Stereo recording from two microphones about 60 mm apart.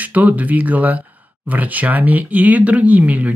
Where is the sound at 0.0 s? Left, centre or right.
Right.